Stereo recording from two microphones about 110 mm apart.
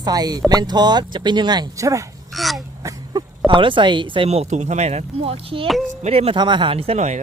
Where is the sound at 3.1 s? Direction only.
35° right (ahead or behind).